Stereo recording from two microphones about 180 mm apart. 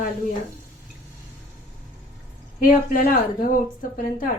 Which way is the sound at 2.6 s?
50° left (ahead or behind).